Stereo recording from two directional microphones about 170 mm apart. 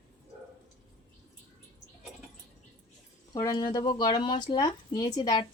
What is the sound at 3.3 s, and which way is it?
Speech, 20° left (ahead or behind).